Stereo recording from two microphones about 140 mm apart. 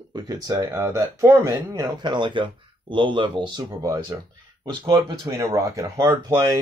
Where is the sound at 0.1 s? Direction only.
30° right (ahead or behind).